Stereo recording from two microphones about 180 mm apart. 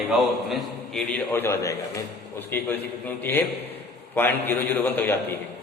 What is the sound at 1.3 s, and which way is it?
A man's voice, 15° left (ahead or behind).